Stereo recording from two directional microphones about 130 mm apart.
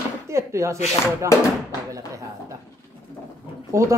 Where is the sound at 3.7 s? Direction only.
25° right (ahead or behind).